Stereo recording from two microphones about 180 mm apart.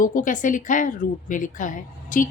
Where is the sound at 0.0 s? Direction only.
45° left (ahead or behind).